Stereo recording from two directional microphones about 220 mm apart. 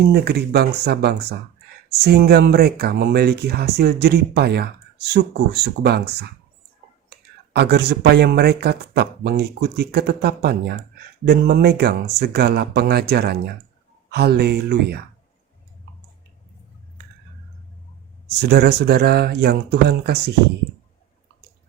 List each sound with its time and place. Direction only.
0.1 s speech: 45° right (ahead or behind)
18.3 s speech: 50° right (ahead or behind)